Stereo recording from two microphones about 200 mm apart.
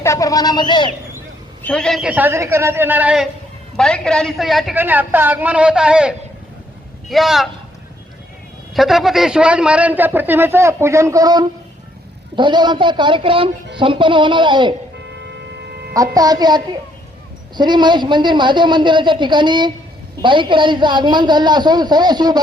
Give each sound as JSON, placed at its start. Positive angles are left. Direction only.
{"t": 0.0, "sound": "speech", "side_deg": 15}
{"t": 1.6, "sound": "a man's voice", "side_deg": 5}
{"t": 3.8, "sound": "a woman's voice", "side_deg": 5}
{"t": 8.7, "sound": "a man's voice", "side_deg": 0}
{"t": 15.1, "sound": "a sound", "side_deg": -60}
{"t": 16.1, "sound": "a woman's voice", "side_deg": -20}